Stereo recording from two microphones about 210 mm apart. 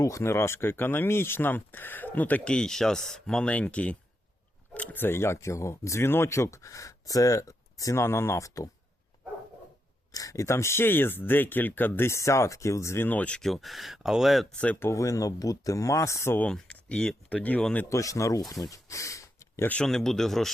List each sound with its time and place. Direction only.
0.0 s speech: 15° left (ahead or behind)
10.1 s speech: 15° left (ahead or behind)